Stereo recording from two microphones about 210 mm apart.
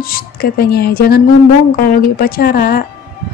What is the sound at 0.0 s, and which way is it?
A woman's voice, 45° left (ahead or behind).